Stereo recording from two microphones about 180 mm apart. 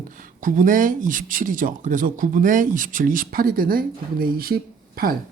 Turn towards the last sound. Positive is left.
turn(degrees=-55)  # may be behind; listen again after turning